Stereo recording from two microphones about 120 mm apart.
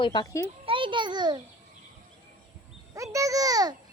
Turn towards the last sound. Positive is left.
turn(degrees=-30)  # may be behind; listen again after turning